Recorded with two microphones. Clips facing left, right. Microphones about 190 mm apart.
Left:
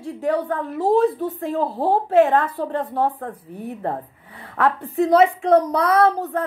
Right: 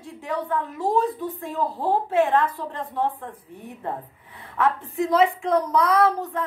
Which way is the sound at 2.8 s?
40° left (ahead or behind).